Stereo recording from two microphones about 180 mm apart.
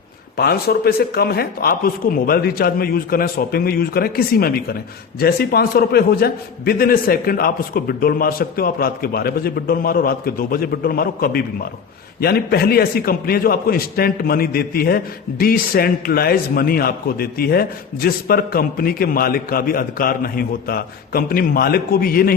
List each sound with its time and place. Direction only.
0.3 s a man's voice: 60° left (ahead or behind)